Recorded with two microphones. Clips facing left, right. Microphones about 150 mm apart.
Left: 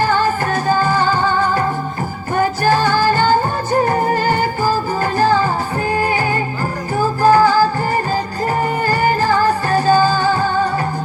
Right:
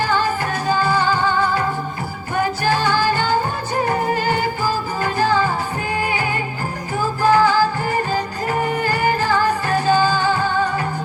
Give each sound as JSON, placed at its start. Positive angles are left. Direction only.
{"t": 0.0, "sound": "music", "side_deg": 45}